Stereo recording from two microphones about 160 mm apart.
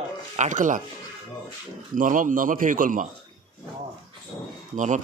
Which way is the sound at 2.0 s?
55° right (ahead or behind).